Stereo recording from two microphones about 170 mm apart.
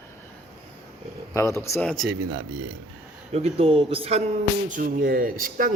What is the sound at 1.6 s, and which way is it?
Speech, 15° left (ahead or behind).